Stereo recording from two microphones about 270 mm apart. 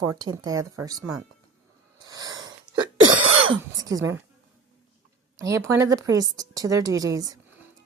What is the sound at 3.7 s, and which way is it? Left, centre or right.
Speech, centre.